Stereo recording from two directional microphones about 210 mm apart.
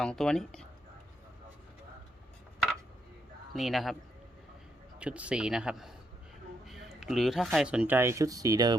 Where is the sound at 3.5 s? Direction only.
Centre (ahead or behind).